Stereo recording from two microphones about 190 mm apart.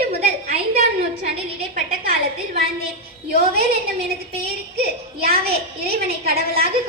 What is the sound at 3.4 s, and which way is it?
A woman's voice, 55° right (ahead or behind).